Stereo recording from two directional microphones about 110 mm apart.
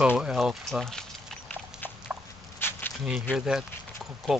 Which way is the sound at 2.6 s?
20° left (ahead or behind).